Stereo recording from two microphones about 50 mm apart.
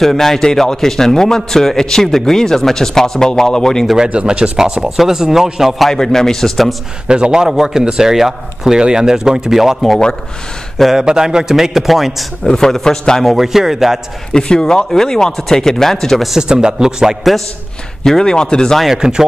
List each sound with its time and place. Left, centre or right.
0.0 s a man's voice: centre
4.1 s speech: right
4.8 s speech: centre
5.9 s a man's voice: centre
7.1 s speech: centre
11.0 s speech: centre
12.4 s a man's voice: centre
13.4 s speech: centre
14.3 s a man's voice: centre
16.3 s speech: centre
18.0 s a man's voice: centre
18.9 s speech: centre